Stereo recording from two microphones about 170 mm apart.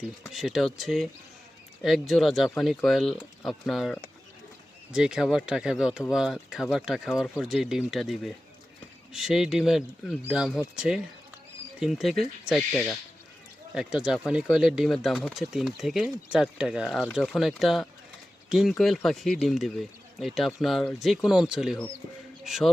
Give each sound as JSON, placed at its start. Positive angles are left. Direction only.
{"t": 0.3, "sound": "speech", "side_deg": 0}